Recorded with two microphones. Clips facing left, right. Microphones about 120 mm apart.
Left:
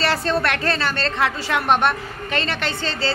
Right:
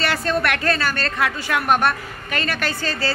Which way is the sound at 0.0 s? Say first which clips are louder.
Left 1 dB; 30° left (ahead or behind).